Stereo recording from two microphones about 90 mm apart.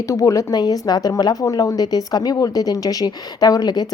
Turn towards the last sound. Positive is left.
turn(degrees=50)  # may be behind; listen again after turning